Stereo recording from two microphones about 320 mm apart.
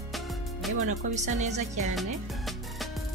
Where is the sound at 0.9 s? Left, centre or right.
Right.